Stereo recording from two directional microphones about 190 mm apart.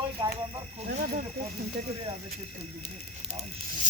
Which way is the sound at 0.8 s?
45° right (ahead or behind).